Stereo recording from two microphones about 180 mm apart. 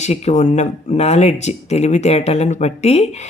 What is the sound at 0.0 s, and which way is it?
Speech, 40° left (ahead or behind).